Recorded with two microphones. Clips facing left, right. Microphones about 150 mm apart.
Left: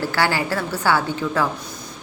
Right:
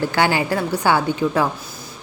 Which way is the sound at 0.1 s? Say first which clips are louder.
Right 3 dB; 20° right (ahead or behind).